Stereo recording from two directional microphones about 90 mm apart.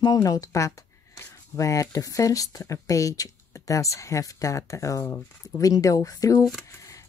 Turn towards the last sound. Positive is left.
turn(degrees=40)  # may be behind; listen again after turning